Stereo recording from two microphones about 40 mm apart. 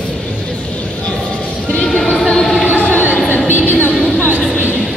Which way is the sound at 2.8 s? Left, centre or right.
Left.